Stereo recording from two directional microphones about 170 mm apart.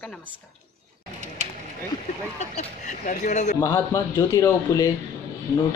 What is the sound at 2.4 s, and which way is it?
Speech, 45° left (ahead or behind).